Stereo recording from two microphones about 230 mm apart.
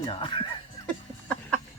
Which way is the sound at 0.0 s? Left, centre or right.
Left.